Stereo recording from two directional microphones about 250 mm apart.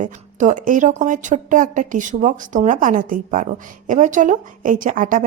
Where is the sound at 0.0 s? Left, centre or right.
Right.